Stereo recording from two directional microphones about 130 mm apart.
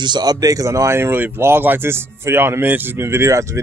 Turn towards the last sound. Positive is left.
turn(degrees=-20)  # may be behind; listen again after turning